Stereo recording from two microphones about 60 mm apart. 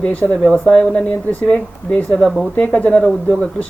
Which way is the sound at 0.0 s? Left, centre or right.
Left.